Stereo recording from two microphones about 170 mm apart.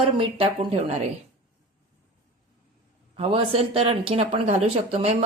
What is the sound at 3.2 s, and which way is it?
Speech, 35° right (ahead or behind).